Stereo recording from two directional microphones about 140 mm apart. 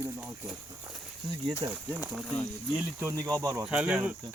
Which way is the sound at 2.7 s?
15° right (ahead or behind).